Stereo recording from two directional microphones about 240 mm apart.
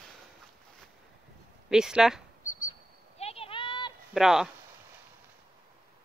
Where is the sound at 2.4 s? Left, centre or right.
Left.